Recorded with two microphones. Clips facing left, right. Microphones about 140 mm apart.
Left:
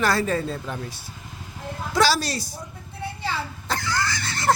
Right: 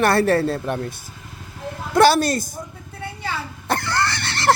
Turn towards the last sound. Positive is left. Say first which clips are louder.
# right 3 dB
turn(degrees=-75)  # may be behind; listen again after turning